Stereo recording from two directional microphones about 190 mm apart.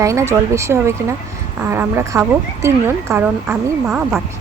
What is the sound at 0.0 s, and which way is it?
Speech, 15° right (ahead or behind).